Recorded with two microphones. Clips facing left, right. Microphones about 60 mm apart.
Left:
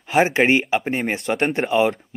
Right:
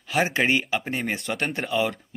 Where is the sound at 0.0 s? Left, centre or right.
Left.